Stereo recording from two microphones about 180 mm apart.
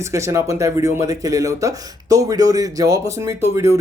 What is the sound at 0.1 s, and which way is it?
Speech, 15° right (ahead or behind).